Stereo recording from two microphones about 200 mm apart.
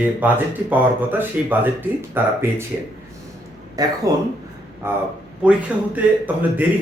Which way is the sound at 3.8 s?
20° right (ahead or behind).